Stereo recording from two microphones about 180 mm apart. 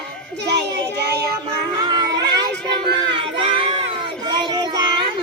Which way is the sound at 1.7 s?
20° right (ahead or behind).